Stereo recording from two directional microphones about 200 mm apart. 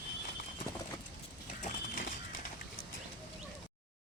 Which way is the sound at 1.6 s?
40° left (ahead or behind).